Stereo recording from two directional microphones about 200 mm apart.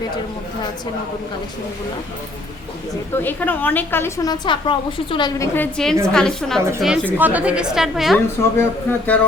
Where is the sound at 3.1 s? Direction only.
10° left (ahead or behind).